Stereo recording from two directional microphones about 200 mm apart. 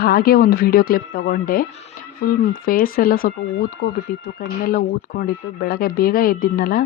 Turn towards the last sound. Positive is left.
turn(degrees=45)  # may be behind; listen again after turning